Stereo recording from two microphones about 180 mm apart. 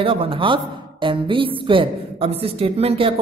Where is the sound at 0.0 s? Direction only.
30° right (ahead or behind).